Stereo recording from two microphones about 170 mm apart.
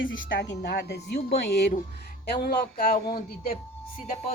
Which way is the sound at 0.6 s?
80° left.